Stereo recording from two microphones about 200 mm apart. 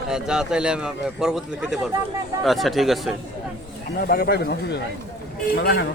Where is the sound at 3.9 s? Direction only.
50° left (ahead or behind).